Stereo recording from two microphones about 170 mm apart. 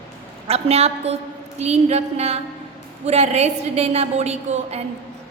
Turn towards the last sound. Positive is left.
turn(degrees=-40)  # may be behind; listen again after turning